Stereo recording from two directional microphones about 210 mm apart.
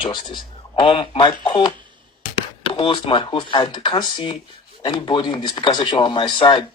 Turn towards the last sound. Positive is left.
turn(degrees=20)  # may be behind; listen again after turning